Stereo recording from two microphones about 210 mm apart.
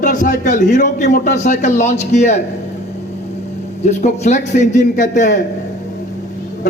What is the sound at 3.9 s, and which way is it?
A man's voice, 35° left (ahead or behind).